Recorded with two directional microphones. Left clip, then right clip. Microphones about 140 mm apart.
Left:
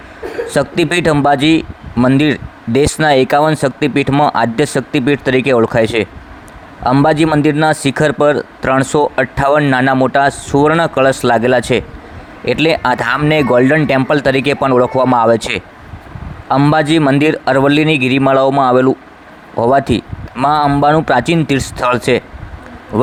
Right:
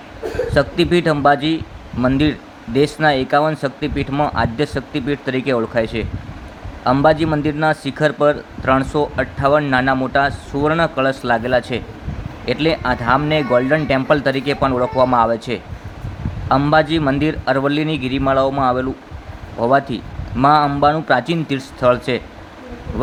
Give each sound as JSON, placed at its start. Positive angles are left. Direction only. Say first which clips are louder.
{"t": 0.5, "sound": "a man's voice", "louder": "left 2 dB", "side_deg": 55}
{"t": 7.3, "sound": "speech", "louder": "left 7 dB", "side_deg": 40}
{"t": 7.6, "sound": "a man's voice", "louder": "left 4 dB", "side_deg": 55}
{"t": 16.7, "sound": "speech", "louder": "left 4 dB", "side_deg": 50}